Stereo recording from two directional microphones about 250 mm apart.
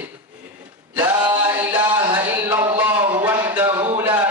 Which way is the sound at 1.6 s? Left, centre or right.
Centre.